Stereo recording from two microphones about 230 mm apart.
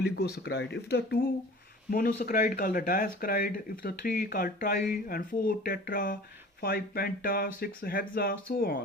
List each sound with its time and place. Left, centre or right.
0.0 s speech: left